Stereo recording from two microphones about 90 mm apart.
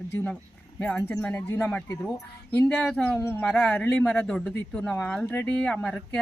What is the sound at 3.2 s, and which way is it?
Speech, 25° left (ahead or behind).